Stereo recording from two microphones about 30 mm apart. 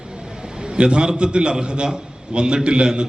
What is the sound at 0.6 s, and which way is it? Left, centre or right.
A man's voice, right.